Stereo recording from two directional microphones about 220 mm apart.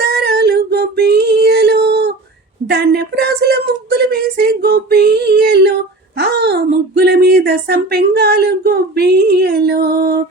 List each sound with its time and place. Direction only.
0.0 s female singing: 50° right (ahead or behind)
2.6 s speech: 50° right (ahead or behind)